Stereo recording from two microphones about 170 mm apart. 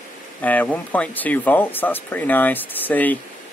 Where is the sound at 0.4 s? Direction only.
10° left (ahead or behind).